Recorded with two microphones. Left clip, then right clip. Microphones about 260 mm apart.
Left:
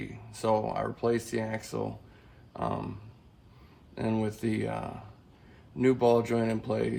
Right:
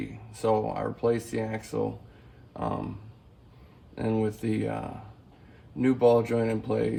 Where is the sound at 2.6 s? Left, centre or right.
Left.